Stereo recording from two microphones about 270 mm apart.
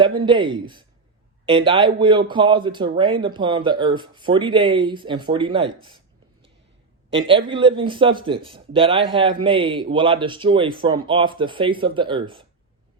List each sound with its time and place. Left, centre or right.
0.3 s a man's voice: centre
7.1 s speech: centre